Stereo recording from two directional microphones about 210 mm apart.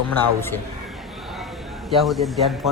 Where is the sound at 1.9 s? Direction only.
Centre (ahead or behind).